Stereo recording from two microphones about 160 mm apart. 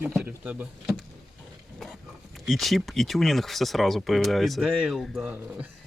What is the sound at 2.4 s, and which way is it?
Speech, centre (ahead or behind).